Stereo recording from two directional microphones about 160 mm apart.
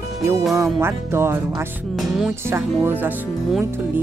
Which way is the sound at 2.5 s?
15° right (ahead or behind).